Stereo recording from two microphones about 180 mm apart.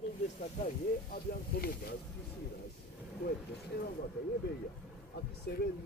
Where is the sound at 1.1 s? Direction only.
55° left (ahead or behind).